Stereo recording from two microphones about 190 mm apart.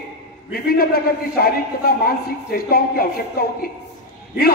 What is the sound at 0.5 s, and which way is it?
A man's voice, 55° left (ahead or behind).